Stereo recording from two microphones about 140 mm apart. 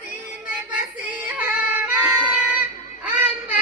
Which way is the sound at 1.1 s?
10° right (ahead or behind).